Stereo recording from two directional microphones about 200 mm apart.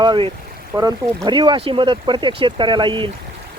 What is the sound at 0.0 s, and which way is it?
Speech, 20° right (ahead or behind).